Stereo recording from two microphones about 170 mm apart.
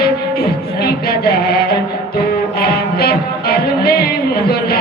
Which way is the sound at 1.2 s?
65° left (ahead or behind).